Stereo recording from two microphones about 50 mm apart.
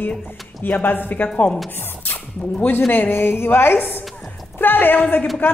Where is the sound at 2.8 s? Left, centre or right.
Left.